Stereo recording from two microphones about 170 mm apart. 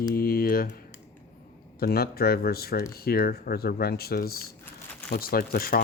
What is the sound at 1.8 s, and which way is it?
Speech, 65° left (ahead or behind).